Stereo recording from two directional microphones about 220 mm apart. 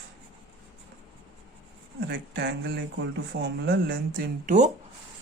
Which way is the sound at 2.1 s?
50° right (ahead or behind).